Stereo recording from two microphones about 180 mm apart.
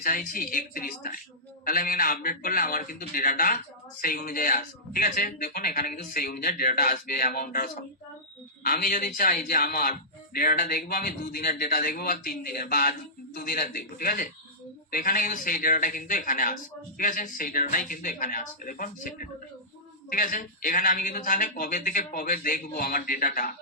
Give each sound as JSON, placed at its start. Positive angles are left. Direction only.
{"t": 0.0, "sound": "speech", "side_deg": 45}